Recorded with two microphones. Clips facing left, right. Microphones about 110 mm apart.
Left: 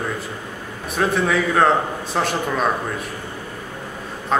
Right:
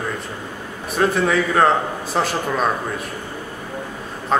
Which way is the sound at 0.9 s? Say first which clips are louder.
Right 1 dB; centre (ahead or behind).